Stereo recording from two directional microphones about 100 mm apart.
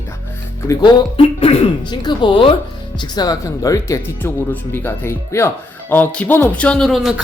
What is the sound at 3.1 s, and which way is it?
Speech, 40° left (ahead or behind).